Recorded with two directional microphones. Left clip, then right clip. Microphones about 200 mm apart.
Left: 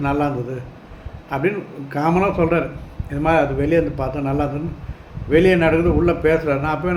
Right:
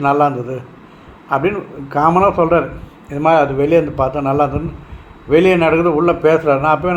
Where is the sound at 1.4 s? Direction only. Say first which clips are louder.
Right 4 dB; 5° left (ahead or behind).